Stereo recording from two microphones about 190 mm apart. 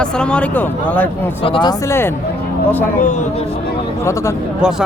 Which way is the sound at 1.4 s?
25° left (ahead or behind).